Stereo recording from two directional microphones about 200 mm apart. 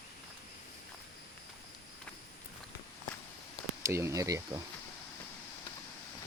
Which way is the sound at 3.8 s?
15° right (ahead or behind).